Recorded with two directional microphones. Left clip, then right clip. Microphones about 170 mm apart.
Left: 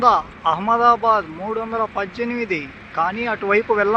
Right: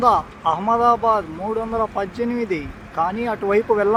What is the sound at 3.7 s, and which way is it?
Speech, 10° left (ahead or behind).